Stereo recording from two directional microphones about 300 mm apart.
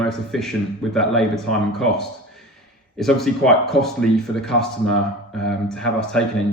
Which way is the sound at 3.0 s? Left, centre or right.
Centre.